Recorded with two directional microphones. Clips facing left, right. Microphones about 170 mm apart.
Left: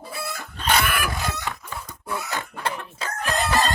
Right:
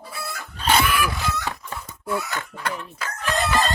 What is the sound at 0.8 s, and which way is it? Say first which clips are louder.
Chicken: right 3 dB; 50° left (ahead or behind).